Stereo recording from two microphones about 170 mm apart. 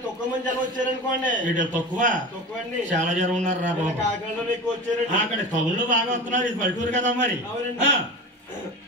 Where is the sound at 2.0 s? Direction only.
50° right (ahead or behind).